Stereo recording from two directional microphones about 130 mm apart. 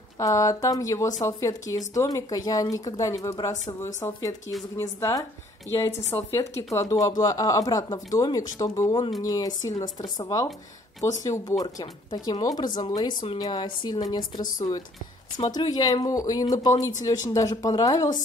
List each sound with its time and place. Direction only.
0.2 s speech: 25° left (ahead or behind)